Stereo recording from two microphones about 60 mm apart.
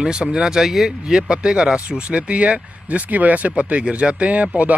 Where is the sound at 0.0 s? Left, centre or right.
Centre.